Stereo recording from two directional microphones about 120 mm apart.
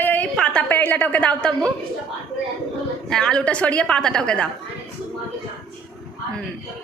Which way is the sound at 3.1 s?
5° left (ahead or behind).